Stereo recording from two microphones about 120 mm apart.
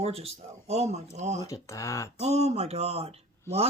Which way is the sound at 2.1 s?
65° right (ahead or behind).